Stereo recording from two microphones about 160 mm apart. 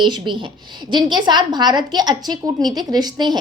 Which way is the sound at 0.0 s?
30° right (ahead or behind).